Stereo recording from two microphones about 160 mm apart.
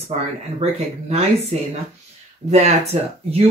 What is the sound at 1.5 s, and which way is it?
Speech, 45° right (ahead or behind).